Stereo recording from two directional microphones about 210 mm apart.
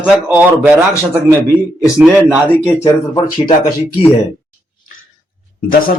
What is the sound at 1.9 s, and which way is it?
Speech, 5° right (ahead or behind).